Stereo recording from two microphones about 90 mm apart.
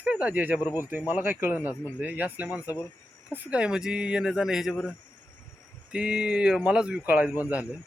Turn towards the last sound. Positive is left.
turn(degrees=-15)  # may be behind; listen again after turning